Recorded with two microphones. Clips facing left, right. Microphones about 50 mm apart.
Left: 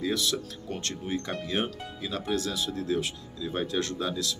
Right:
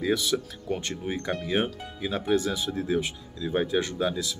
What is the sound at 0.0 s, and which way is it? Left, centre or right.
Speech, centre.